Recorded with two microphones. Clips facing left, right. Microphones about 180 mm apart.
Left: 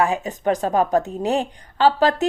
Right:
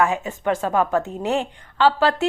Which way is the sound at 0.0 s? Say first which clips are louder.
Left 1 dB; 35° left (ahead or behind).